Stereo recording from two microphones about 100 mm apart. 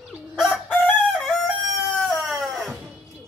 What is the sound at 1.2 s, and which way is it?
Chicken, centre (ahead or behind).